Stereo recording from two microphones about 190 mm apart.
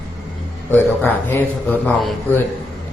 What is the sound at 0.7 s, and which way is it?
A man's voice, 10° left (ahead or behind).